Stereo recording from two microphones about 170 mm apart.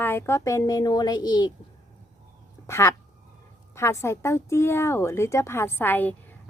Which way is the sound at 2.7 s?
15° left (ahead or behind).